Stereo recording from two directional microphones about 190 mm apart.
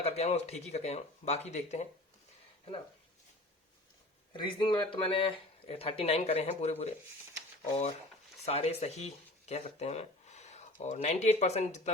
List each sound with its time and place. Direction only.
0.0 s speech: 35° left (ahead or behind)
4.3 s speech: 25° left (ahead or behind)
8.4 s speech: 35° left (ahead or behind)